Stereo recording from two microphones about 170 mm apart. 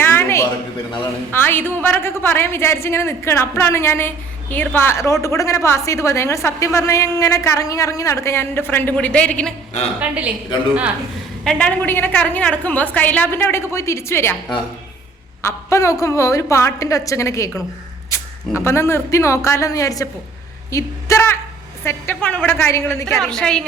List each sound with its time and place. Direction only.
0.0 s a sound: 15° left (ahead or behind)
1.3 s a woman's voice: 10° left (ahead or behind)
10.0 s speech: 10° right (ahead or behind)
11.4 s a woman's voice: 5° left (ahead or behind)
15.4 s a woman's voice: 15° left (ahead or behind)
18.5 s a woman's voice: 15° left (ahead or behind)
23.0 s a woman's voice: centre (ahead or behind)